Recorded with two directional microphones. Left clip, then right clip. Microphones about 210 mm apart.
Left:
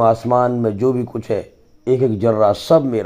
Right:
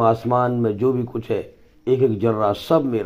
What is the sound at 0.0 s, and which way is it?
Speech, 45° left (ahead or behind).